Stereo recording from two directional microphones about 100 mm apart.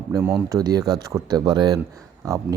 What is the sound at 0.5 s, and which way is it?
Speech, 40° right (ahead or behind).